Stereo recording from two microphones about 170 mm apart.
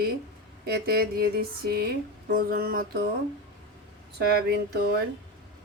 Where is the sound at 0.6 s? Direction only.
65° right (ahead or behind).